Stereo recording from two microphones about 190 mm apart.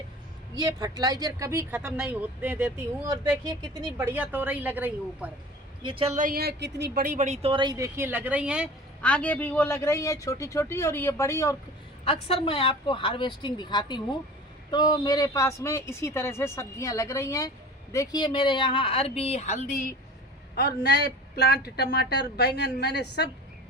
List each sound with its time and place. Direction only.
0.5 s speech: 20° right (ahead or behind)
5.8 s speech: 30° right (ahead or behind)
6.1 s a woman's voice: 50° right (ahead or behind)
7.5 s speech: 20° right (ahead or behind); by 8.7 s 5° right (ahead or behind)
9.0 s speech: 5° left (ahead or behind)
12.0 s speech: 30° left (ahead or behind)
20.6 s speech: 60° left (ahead or behind)